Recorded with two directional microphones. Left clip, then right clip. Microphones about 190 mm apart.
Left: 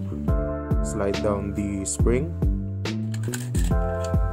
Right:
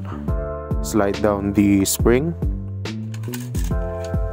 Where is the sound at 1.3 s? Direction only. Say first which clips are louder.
Right 9 dB; 45° right (ahead or behind).